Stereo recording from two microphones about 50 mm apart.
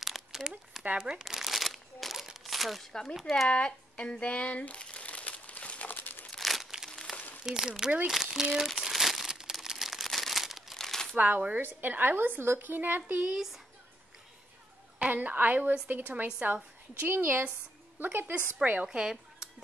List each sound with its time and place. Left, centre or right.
0.0 s a sound: centre
0.9 s speech: centre
1.2 s crumpling: centre
2.9 s speech: centre
3.2 s speech: centre
3.4 s crumpling: left
6.3 s crumpling: centre
7.4 s speech: centre
8.7 s crumpling: centre
11.1 s a woman's voice: right
13.2 s speech: centre
15.0 s a woman's voice: right
18.9 s speech: centre